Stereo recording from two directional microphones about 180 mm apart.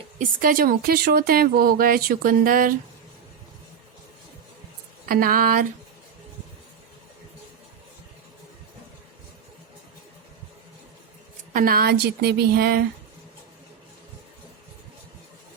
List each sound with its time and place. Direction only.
0.2 s speech: 50° right (ahead or behind)
5.0 s speech: 50° right (ahead or behind)
11.5 s a woman's voice: 55° right (ahead or behind)